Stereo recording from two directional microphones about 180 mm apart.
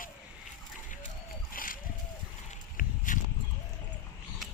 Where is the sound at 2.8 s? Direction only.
45° left (ahead or behind).